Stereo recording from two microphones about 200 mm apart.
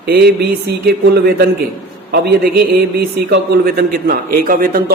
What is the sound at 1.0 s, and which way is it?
Speech, 55° right (ahead or behind).